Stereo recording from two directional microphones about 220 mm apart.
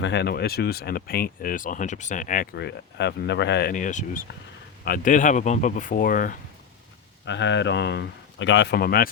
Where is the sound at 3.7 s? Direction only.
35° left (ahead or behind).